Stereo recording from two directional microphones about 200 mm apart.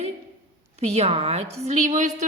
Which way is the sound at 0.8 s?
35° right (ahead or behind).